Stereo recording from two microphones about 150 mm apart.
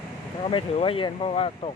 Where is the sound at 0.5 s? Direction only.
35° left (ahead or behind).